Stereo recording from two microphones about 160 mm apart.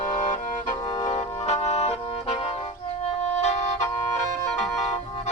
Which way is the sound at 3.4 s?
45° left (ahead or behind).